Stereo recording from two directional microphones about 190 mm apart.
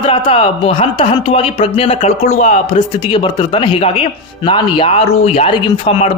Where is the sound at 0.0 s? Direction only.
30° left (ahead or behind).